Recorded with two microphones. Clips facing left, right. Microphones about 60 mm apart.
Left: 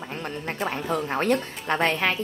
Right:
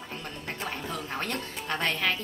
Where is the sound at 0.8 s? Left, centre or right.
Left.